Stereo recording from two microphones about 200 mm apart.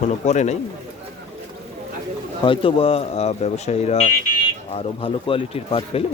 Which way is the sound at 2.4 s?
25° left (ahead or behind).